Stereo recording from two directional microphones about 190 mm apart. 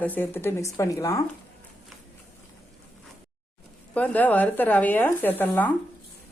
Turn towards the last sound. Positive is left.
turn(degrees=10)  # may be behind; listen again after turning